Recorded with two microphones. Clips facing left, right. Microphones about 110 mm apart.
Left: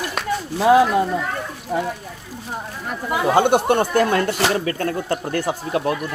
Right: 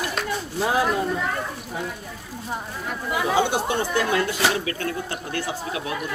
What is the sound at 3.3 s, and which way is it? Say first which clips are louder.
Speech: left 7 dB; 55° left (ahead or behind).